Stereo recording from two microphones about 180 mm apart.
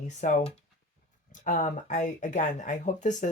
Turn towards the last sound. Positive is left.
turn(degrees=45)  # may be behind; listen again after turning